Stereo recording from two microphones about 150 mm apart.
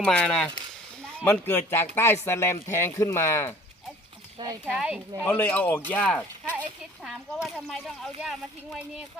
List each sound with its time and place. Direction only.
0.0 s speech: 5° left (ahead or behind)
4.4 s speech: 30° right (ahead or behind)
4.7 s speech: 10° right (ahead or behind)
5.2 s speech: 10° left (ahead or behind)